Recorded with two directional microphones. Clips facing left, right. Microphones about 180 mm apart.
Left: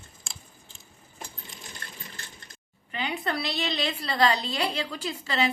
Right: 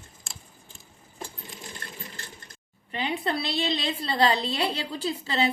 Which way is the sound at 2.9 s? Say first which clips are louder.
Right 2 dB; 30° right (ahead or behind).